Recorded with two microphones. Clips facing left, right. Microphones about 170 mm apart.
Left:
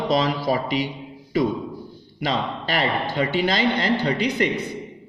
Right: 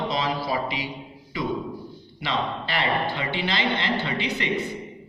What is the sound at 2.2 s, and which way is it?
Speech, 40° left (ahead or behind).